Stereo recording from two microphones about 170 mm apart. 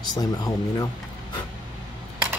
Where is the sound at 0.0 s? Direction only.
25° left (ahead or behind).